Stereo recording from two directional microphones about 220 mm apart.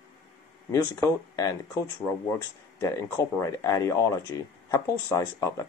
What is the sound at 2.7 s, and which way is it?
Speech, 15° left (ahead or behind).